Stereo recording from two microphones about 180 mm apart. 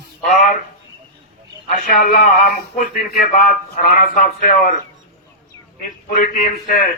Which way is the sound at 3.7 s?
50° left (ahead or behind).